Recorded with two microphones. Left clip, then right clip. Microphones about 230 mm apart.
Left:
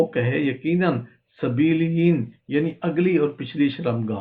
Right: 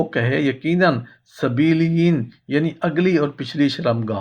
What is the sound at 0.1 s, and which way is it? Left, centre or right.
Speech, right.